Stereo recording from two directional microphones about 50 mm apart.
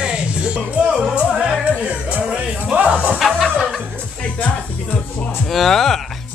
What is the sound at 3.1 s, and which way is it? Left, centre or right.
Music, centre.